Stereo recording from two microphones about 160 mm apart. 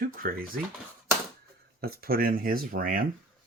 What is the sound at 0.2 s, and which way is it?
Speech, 60° right (ahead or behind).